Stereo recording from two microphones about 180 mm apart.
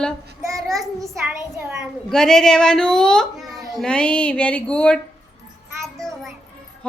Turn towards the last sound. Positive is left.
turn(degrees=0)  # may be behind; listen again after turning